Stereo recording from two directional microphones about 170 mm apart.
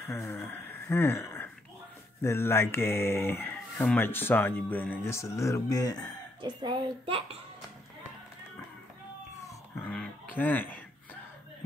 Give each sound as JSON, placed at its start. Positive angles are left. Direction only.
{"t": 0.0, "sound": "speech", "side_deg": 15}
{"t": 6.4, "sound": "a child's voice", "side_deg": -25}
{"t": 9.8, "sound": "a sound", "side_deg": 10}